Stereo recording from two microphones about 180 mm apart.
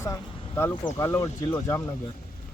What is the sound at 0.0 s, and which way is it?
Vehicle, 15° left (ahead or behind).